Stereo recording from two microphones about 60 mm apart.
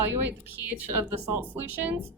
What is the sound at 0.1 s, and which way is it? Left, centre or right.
Speech, right.